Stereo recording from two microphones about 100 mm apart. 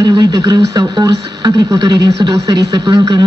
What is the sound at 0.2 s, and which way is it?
Speech, 40° right (ahead or behind).